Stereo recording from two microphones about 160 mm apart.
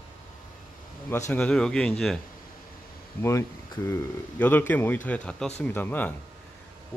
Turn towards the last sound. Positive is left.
turn(degrees=10)  # may be behind; listen again after turning